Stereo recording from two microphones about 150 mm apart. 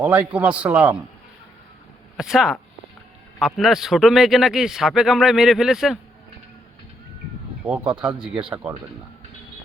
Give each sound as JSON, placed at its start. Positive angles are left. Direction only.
{"t": 0.0, "sound": "a man's voice", "side_deg": -10}
{"t": 2.1, "sound": "a man's voice", "side_deg": -5}
{"t": 7.6, "sound": "a man's voice", "side_deg": -5}
{"t": 8.3, "sound": "speech", "side_deg": -35}